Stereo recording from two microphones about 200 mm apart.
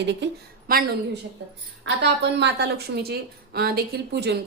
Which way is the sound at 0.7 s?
45° right (ahead or behind).